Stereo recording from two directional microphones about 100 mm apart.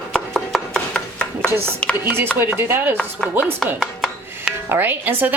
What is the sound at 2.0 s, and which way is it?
Speech, 20° right (ahead or behind).